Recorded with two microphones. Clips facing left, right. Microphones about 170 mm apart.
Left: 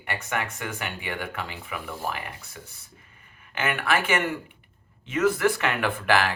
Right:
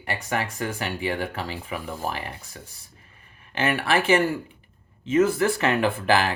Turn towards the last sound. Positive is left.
turn(degrees=-25)  # may be behind; listen again after turning